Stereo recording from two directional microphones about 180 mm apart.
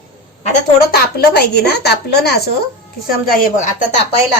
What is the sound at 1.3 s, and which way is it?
A woman's voice, 60° left (ahead or behind).